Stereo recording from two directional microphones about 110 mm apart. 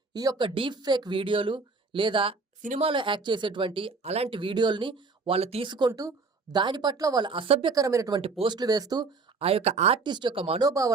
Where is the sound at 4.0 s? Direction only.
75° right (ahead or behind).